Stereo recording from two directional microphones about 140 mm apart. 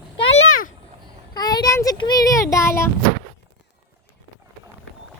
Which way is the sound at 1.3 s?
30° left (ahead or behind).